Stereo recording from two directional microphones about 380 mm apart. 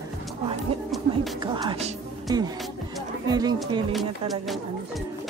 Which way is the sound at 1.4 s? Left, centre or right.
Centre.